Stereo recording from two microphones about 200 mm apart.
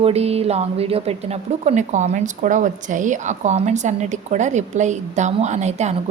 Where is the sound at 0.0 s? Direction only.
30° right (ahead or behind).